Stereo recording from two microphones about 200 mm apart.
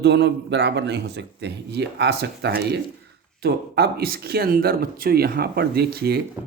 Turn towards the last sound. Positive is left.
turn(degrees=-50)  # may be behind; listen again after turning